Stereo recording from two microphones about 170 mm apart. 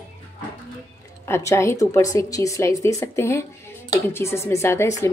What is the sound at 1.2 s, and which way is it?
A woman's voice, 15° left (ahead or behind).